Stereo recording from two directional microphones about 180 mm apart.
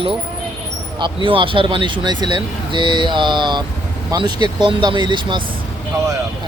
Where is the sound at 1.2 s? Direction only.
30° right (ahead or behind).